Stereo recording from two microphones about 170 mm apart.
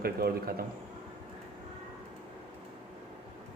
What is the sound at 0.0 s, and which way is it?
Speech, 65° right (ahead or behind).